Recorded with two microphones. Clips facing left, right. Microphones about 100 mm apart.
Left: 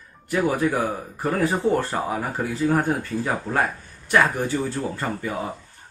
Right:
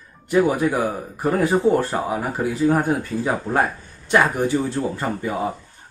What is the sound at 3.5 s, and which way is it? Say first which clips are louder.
Speech: right 3 dB; 20° right (ahead or behind).